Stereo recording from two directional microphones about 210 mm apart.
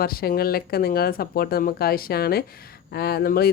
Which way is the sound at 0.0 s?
45° left (ahead or behind).